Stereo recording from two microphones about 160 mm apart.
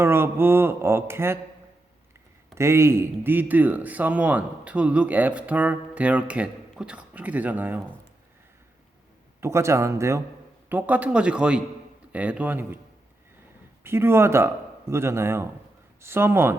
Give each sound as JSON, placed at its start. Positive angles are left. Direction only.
{"t": 0.0, "sound": "speech", "side_deg": -15}
{"t": 2.6, "sound": "speech", "side_deg": -15}
{"t": 9.4, "sound": "speech", "side_deg": -15}
{"t": 13.8, "sound": "speech", "side_deg": -15}